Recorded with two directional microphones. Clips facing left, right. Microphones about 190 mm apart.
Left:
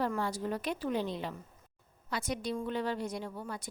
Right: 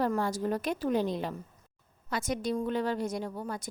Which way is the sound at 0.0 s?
45° right (ahead or behind).